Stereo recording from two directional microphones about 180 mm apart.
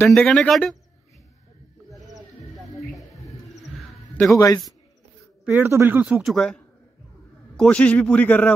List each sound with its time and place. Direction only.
0.0 s speech: 5° left (ahead or behind)
2.1 s music: centre (ahead or behind)
3.3 s bird: centre (ahead or behind)
4.4 s a man's voice: 20° left (ahead or behind)
5.4 s a man's voice: 10° right (ahead or behind); by 8.5 s 10° left (ahead or behind)